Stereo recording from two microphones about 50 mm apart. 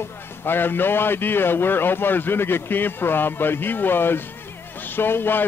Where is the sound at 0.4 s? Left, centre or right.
Left.